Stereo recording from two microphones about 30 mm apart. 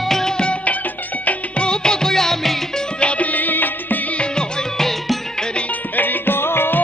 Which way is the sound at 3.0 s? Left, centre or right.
Left.